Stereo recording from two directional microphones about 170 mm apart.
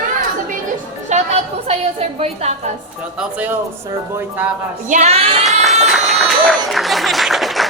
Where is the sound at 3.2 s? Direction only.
10° right (ahead or behind).